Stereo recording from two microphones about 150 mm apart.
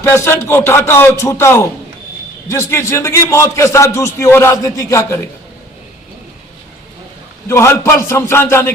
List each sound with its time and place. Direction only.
0.1 s a man's voice: 15° left (ahead or behind)
7.4 s speech: 15° left (ahead or behind)